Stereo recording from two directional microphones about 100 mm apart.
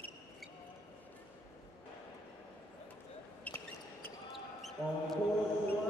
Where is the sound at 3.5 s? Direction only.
15° left (ahead or behind).